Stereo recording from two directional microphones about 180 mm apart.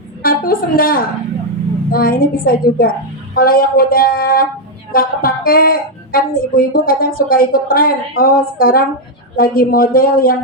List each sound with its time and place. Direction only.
0.2 s a woman's voice: 55° left (ahead or behind)